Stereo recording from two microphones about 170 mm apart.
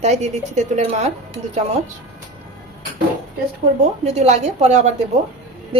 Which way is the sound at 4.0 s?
40° right (ahead or behind).